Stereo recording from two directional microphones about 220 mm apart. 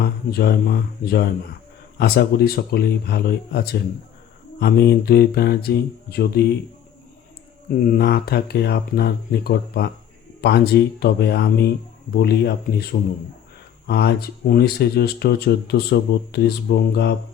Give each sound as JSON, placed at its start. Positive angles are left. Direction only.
{"t": 0.0, "sound": "speech", "side_deg": 45}
{"t": 7.9, "sound": "speech", "side_deg": 45}